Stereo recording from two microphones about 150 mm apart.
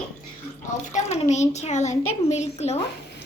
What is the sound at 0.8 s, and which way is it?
A woman's voice, 50° left (ahead or behind).